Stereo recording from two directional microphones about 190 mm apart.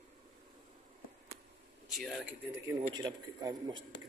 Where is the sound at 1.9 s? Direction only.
Centre (ahead or behind).